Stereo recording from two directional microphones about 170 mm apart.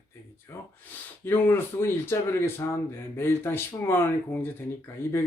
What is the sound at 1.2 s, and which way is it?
Speech, 15° left (ahead or behind).